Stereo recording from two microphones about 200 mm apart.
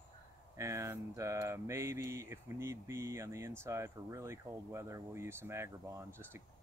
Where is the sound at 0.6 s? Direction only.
15° right (ahead or behind).